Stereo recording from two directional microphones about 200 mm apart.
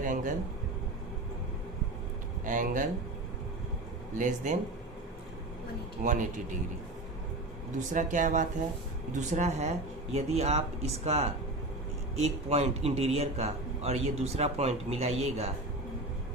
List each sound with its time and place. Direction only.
0.0 s speech: 40° right (ahead or behind)
2.4 s a man's voice: 40° right (ahead or behind)
4.2 s a man's voice: 40° right (ahead or behind)
6.0 s a man's voice: 40° right (ahead or behind)
7.8 s a man's voice: 40° right (ahead or behind)